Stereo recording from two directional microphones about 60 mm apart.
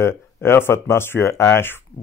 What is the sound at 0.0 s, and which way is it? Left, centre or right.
Speech, left.